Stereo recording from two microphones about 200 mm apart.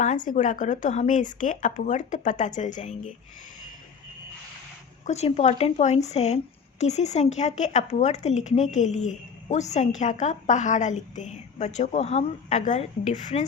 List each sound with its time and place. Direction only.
0.0 s speech: 40° left (ahead or behind)
5.0 s speech: 35° left (ahead or behind)